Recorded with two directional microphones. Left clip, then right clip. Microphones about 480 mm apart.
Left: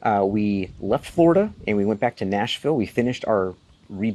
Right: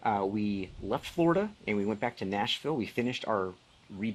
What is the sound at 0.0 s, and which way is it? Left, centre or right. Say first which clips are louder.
Speech: left 9 dB; left.